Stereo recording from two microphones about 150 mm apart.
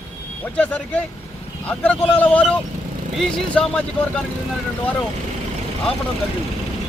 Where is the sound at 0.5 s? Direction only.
10° left (ahead or behind).